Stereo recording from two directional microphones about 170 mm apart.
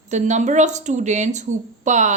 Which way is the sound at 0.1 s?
45° right (ahead or behind).